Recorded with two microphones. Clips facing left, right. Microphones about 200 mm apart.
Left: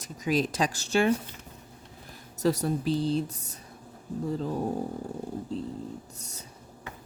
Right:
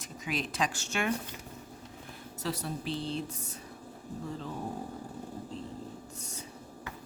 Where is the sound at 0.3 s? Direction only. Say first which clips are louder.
Left 7 dB; 40° left (ahead or behind).